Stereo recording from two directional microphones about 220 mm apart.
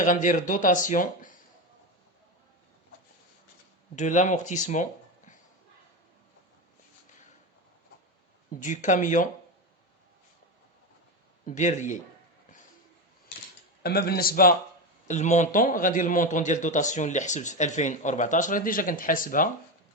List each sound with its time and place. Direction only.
0.0 s a man's voice: 35° left (ahead or behind)
3.9 s speech: 35° left (ahead or behind)
8.5 s a man's voice: 35° left (ahead or behind)
11.4 s a man's voice: 35° left (ahead or behind)
13.8 s a man's voice: 45° left (ahead or behind)